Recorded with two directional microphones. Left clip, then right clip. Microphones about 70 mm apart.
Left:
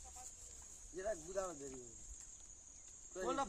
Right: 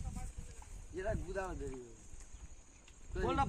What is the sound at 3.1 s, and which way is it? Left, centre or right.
Speech, left.